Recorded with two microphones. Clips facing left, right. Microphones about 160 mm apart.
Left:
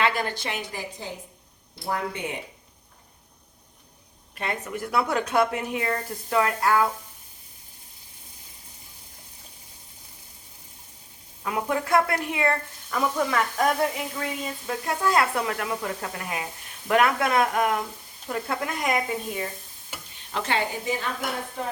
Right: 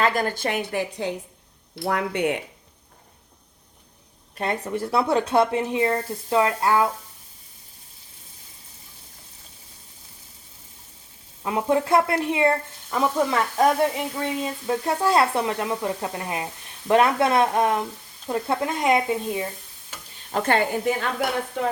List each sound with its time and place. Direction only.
0.0 s a woman's voice: 45° right (ahead or behind); by 2.4 s 65° right (ahead or behind)
4.4 s speech: 35° right (ahead or behind)
11.4 s speech: 25° right (ahead or behind)
20.3 s a woman's voice: 50° right (ahead or behind)